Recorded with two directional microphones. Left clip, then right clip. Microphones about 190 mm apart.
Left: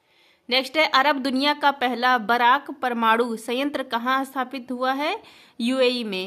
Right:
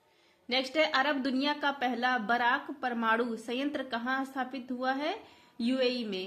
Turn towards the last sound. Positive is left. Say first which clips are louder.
# left 9 dB
turn(degrees=40)  # may be behind; listen again after turning